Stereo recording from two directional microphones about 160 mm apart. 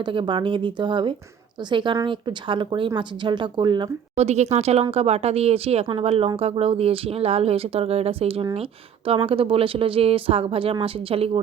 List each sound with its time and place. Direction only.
0.0 s speech: 30° right (ahead or behind)
4.1 s speech: 45° right (ahead or behind)